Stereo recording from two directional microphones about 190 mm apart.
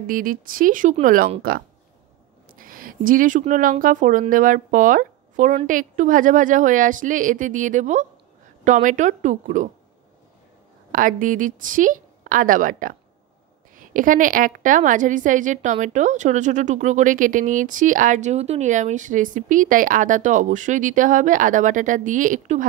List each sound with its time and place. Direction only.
0.0 s a woman's voice: 45° right (ahead or behind)
2.5 s a woman's voice: 45° right (ahead or behind)
10.9 s a woman's voice: 45° right (ahead or behind)